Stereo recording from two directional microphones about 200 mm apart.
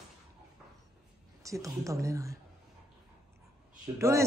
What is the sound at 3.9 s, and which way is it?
Speech, 15° right (ahead or behind).